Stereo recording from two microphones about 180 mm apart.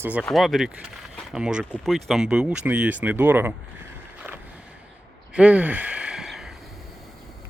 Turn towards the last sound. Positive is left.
turn(degrees=0)  # may be behind; listen again after turning